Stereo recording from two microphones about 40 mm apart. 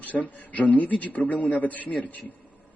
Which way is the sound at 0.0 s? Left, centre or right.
Left.